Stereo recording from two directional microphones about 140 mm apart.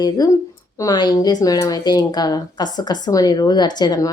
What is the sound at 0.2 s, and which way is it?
Speech, 25° left (ahead or behind).